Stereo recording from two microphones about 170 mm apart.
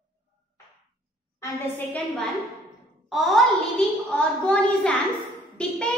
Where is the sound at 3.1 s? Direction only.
Centre (ahead or behind).